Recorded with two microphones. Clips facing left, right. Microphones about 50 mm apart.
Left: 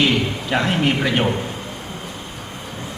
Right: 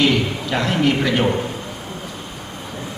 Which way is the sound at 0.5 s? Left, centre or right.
Left.